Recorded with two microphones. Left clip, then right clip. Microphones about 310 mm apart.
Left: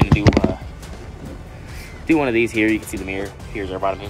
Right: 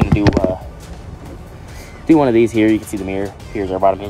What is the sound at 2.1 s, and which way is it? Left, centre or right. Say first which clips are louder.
Speech: right 5 dB; centre.